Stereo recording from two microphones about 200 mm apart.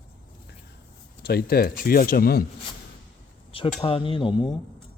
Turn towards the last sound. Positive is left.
turn(degrees=25)  # may be behind; listen again after turning